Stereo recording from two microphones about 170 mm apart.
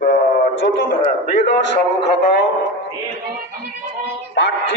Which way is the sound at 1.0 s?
40° left (ahead or behind).